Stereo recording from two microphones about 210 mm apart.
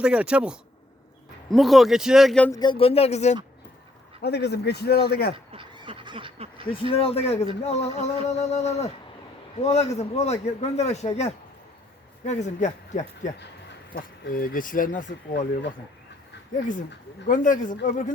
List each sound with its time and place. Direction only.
0.0 s speech: 5° right (ahead or behind)
2.5 s speech: 20° left (ahead or behind)
4.2 s a man's voice: 50° left (ahead or behind)
5.5 s duck: 25° right (ahead or behind)
6.7 s speech: 25° left (ahead or behind)
7.6 s a sound: 30° left (ahead or behind)
17.2 s a sound: 40° left (ahead or behind)